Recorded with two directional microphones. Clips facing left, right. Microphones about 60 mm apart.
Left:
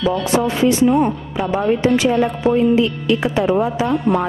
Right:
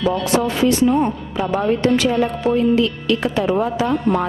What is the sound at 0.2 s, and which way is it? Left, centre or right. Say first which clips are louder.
A woman's voice: left 1 dB; centre.